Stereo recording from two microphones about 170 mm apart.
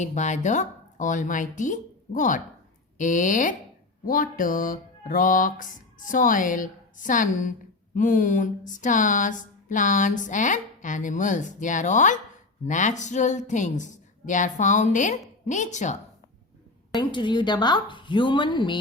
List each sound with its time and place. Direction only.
0.0 s speech: 45° left (ahead or behind)
16.9 s speech: 25° left (ahead or behind)